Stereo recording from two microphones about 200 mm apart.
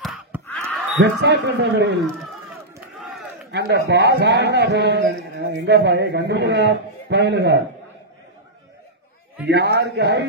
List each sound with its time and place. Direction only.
0.0 s a sound: centre (ahead or behind)
0.9 s a man's voice: 60° right (ahead or behind)
3.0 s crowd: centre (ahead or behind)
3.5 s a man's voice: 55° right (ahead or behind)
9.5 s a man's voice: 55° right (ahead or behind)